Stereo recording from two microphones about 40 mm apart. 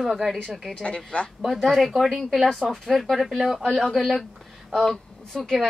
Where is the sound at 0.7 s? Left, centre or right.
Left.